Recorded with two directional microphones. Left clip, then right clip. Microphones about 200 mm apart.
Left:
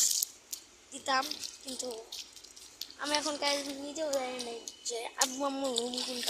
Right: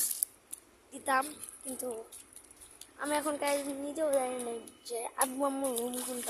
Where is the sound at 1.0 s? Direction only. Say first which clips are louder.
Right 1 dB; 15° right (ahead or behind).